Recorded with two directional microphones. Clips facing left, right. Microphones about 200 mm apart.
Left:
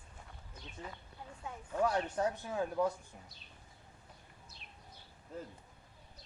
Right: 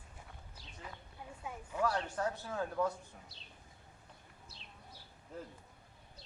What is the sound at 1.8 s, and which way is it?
Speech, 20° left (ahead or behind).